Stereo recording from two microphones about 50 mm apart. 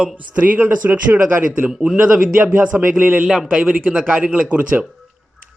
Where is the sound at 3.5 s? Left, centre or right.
Right.